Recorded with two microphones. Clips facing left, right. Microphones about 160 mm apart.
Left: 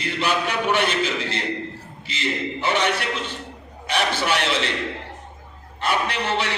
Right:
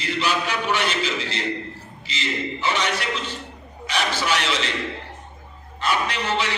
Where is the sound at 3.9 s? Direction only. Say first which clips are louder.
Left 2 dB; 60° left (ahead or behind).